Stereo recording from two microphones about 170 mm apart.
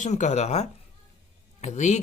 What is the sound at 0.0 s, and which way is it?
A man's voice, 45° left (ahead or behind).